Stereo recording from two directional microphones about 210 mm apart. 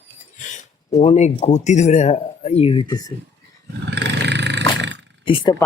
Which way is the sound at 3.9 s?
55° right (ahead or behind).